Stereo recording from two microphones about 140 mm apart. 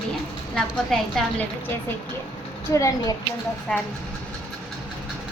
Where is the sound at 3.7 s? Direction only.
5° left (ahead or behind).